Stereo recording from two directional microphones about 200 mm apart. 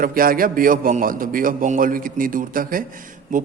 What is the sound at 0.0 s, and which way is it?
A man's voice, 45° right (ahead or behind).